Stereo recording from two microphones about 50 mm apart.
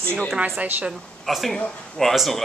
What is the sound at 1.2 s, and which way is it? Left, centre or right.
Speech, centre.